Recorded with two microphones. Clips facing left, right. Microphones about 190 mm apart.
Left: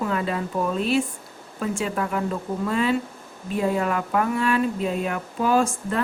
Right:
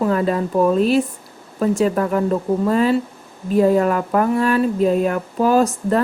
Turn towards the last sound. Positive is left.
turn(degrees=-40)  # may be behind; listen again after turning